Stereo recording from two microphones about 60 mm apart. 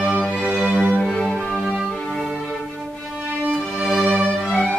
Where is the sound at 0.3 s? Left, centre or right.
Centre.